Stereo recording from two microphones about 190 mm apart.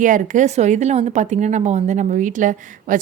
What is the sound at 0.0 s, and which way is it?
A woman's voice, 45° right (ahead or behind).